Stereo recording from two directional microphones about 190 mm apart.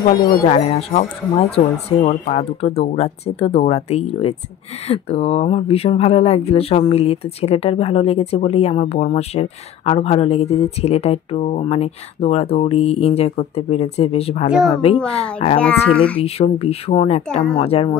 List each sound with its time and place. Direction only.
0.0 s speech: 50° left (ahead or behind)
0.5 s speech: 30° left (ahead or behind)
14.5 s speech: centre (ahead or behind)
15.3 s speech: 25° left (ahead or behind)